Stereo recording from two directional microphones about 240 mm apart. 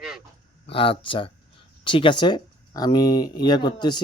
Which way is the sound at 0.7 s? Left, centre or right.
Left.